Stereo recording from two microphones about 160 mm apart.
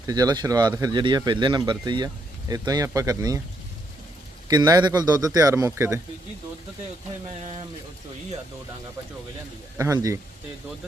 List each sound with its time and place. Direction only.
0.1 s speech: 25° right (ahead or behind)
4.4 s speech: 25° right (ahead or behind)
9.7 s speech: 20° right (ahead or behind)